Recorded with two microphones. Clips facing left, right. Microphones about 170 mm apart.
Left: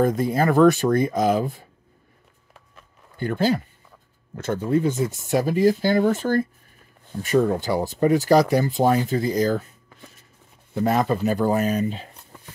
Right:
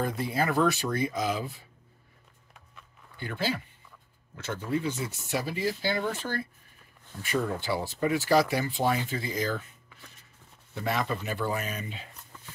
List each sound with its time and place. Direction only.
0.0 s speech: 45° left (ahead or behind)
3.2 s speech: 45° left (ahead or behind)